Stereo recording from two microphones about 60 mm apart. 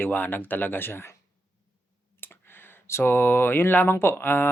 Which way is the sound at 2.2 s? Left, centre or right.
Left.